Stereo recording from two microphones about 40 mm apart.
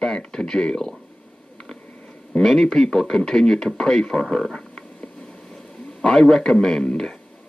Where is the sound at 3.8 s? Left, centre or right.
Centre.